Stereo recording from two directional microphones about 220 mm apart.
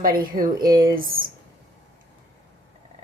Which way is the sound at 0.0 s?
40° right (ahead or behind).